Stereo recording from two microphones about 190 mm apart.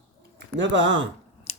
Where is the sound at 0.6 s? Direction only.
75° right (ahead or behind).